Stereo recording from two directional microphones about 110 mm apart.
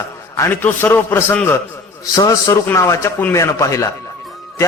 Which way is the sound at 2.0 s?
35° left (ahead or behind).